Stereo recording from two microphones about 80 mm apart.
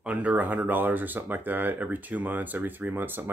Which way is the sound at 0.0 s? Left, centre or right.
Centre.